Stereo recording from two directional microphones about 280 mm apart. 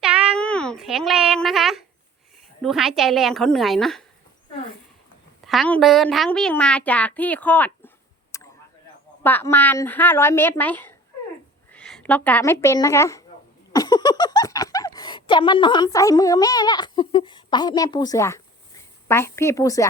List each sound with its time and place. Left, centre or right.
0.0 s meow: centre
2.6 s a child's voice: centre
5.5 s a child's voice: centre
8.3 s a sound: centre
9.2 s a woman's voice: centre